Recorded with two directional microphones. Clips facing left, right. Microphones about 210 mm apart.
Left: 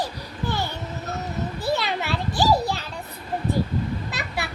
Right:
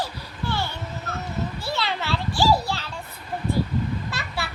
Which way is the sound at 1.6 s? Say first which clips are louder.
Left 3 dB; 15° left (ahead or behind).